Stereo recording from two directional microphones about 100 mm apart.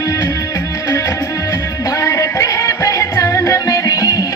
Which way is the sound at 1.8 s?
35° left (ahead or behind).